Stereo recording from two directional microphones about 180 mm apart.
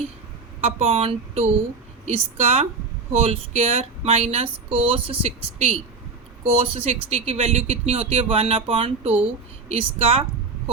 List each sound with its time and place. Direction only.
0.6 s speech: 35° right (ahead or behind)